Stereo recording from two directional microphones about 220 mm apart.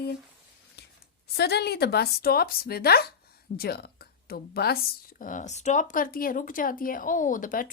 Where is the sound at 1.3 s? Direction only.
45° left (ahead or behind).